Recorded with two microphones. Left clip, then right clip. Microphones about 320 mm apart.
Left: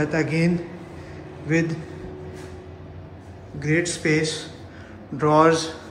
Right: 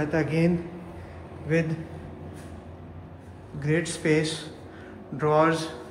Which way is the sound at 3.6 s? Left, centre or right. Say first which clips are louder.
Left 4 dB; centre.